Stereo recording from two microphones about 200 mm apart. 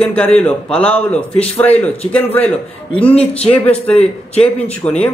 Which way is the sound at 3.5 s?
5° left (ahead or behind).